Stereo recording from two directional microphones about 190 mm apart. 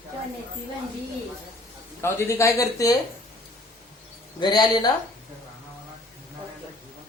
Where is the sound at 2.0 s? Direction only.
15° left (ahead or behind).